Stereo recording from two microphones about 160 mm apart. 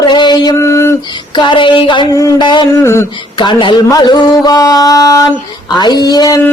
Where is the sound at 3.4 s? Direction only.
30° left (ahead or behind).